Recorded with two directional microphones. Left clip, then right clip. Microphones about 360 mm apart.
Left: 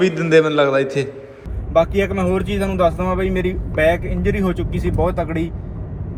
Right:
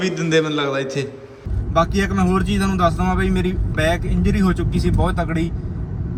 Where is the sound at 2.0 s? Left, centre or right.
Left.